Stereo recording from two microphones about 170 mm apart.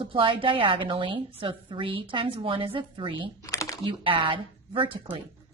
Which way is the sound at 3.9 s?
30° right (ahead or behind).